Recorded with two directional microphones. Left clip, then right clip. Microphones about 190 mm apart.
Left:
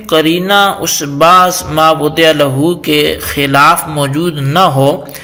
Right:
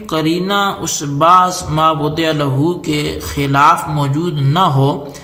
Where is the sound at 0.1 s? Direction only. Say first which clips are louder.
Left 7 dB; 15° left (ahead or behind).